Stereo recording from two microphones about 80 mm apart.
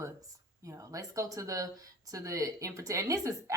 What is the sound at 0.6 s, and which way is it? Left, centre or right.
Speech, right.